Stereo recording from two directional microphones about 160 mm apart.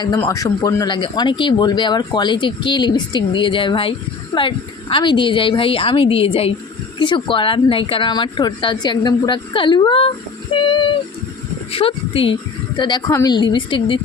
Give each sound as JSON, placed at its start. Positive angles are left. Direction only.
{"t": 0.2, "sound": "a woman's voice", "side_deg": 20}